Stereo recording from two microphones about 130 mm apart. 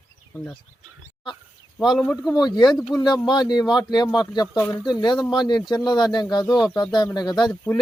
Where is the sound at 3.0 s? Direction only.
35° left (ahead or behind).